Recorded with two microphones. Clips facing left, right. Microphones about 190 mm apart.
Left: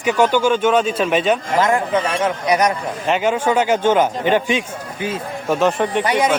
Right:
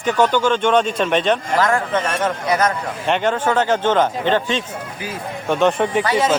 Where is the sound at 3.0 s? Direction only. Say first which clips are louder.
Left 1 dB; 5° left (ahead or behind).